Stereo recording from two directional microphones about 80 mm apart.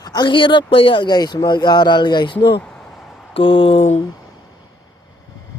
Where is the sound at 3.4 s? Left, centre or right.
Left.